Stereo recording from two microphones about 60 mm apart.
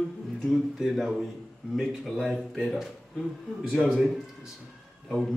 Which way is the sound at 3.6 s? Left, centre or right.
Centre.